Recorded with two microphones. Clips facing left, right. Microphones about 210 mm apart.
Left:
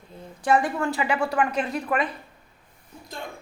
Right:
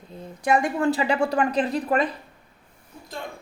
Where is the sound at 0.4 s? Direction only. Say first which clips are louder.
Even; 20° right (ahead or behind).